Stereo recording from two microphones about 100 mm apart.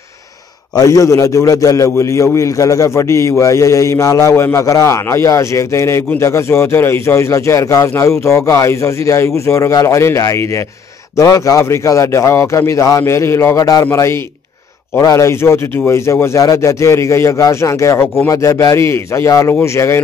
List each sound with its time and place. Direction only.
0.7 s a man's voice: 35° left (ahead or behind)
15.0 s a man's voice: 30° left (ahead or behind)